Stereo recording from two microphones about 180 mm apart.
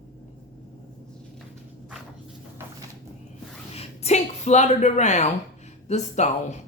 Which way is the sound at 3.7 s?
35° left (ahead or behind).